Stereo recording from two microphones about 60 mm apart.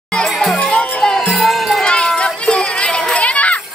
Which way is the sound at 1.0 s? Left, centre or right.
Centre.